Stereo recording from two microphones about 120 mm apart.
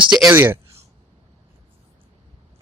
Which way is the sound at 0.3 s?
20° right (ahead or behind).